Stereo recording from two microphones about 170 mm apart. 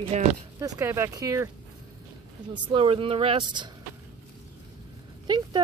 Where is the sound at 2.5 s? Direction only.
30° right (ahead or behind).